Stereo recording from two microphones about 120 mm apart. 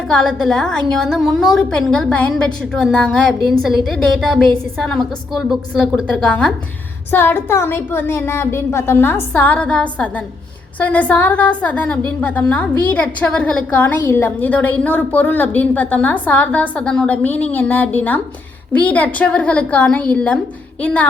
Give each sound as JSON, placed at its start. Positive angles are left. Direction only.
{"t": 0.1, "sound": "a woman's voice", "side_deg": 5}